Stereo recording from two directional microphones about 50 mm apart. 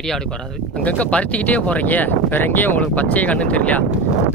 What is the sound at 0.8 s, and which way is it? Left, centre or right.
Speech, left.